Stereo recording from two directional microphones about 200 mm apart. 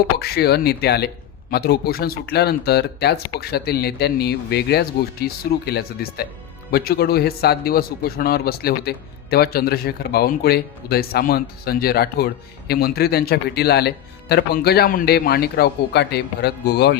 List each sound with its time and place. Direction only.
0.2 s a man's voice: 50° left (ahead or behind)